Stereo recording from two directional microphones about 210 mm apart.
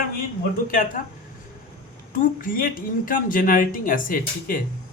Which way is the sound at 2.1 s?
40° left (ahead or behind).